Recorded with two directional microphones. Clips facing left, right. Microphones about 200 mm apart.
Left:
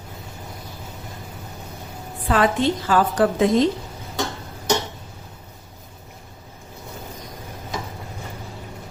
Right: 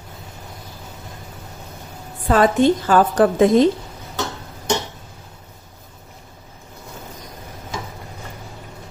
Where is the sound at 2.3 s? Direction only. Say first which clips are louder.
Right 5 dB; 40° right (ahead or behind).